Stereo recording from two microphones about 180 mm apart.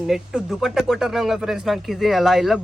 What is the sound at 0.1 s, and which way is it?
Speech, centre (ahead or behind).